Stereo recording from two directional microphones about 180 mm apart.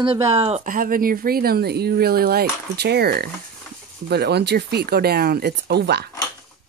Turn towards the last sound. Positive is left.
turn(degrees=-65)  # may be behind; listen again after turning